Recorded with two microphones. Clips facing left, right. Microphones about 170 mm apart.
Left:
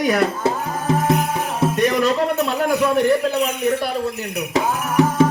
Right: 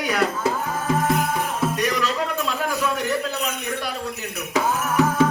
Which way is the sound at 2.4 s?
55° left (ahead or behind).